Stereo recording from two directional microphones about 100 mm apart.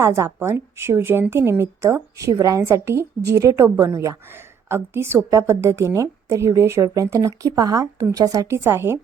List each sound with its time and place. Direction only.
0.0 s a woman's voice: 30° right (ahead or behind)